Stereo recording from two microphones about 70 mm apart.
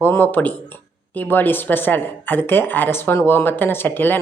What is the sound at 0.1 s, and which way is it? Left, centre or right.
Speech, left.